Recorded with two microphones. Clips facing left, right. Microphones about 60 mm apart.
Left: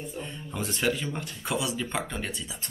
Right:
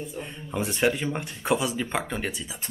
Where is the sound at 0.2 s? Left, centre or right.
Centre.